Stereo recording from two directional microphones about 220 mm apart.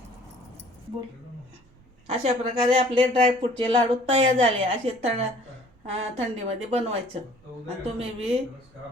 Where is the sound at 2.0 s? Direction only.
30° right (ahead or behind).